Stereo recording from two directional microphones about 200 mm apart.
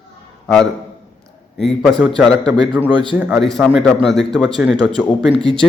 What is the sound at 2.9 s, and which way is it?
Speech, 25° right (ahead or behind).